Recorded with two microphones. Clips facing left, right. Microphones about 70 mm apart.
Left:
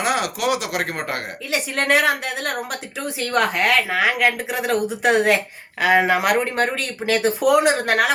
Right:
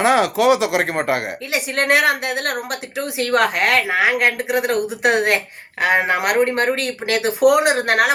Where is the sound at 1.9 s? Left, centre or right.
Right.